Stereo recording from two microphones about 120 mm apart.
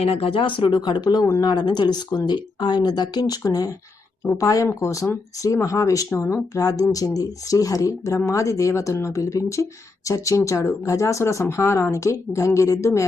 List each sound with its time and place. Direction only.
0.0 s speech: 50° left (ahead or behind); by 13.1 s 25° left (ahead or behind)